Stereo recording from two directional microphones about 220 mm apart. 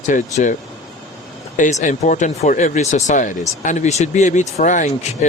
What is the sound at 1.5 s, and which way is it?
Speech, 35° left (ahead or behind).